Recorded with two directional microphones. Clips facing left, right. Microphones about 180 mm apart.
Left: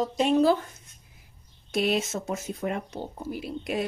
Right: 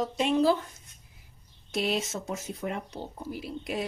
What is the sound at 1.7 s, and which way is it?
A woman's voice, 55° left (ahead or behind).